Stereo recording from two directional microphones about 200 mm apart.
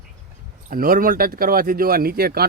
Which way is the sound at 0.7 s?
45° right (ahead or behind).